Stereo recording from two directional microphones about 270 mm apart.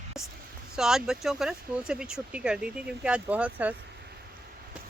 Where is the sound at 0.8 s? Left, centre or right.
Centre.